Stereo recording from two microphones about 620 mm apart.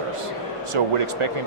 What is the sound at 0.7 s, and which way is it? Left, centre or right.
Speech, right.